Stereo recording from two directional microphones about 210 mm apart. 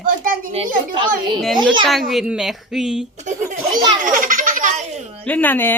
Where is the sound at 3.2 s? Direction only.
35° right (ahead or behind).